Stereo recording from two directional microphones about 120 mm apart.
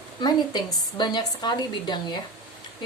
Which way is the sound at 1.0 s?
35° left (ahead or behind).